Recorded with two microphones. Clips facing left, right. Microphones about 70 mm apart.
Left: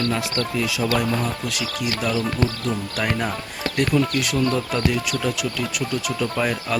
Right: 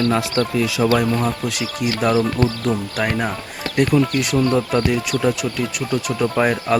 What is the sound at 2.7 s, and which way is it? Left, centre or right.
Speech, centre.